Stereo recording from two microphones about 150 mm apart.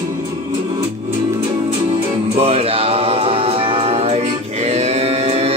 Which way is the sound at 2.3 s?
40° right (ahead or behind).